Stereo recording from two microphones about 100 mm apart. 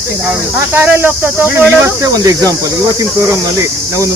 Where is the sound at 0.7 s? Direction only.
20° right (ahead or behind).